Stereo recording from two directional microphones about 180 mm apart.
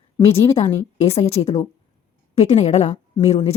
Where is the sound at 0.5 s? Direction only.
35° left (ahead or behind).